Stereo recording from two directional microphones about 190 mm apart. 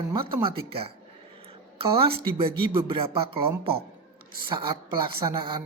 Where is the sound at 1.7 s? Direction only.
30° right (ahead or behind).